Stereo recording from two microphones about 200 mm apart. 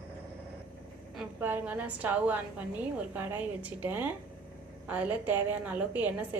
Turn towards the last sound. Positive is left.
turn(degrees=-5)  # may be behind; listen again after turning